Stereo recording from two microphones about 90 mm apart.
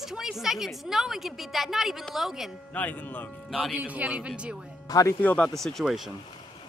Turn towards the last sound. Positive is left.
turn(degrees=0)  # may be behind; listen again after turning